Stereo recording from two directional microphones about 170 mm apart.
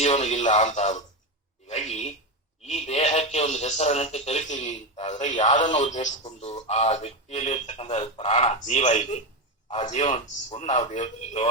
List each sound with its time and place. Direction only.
0.0 s speech: 40° left (ahead or behind)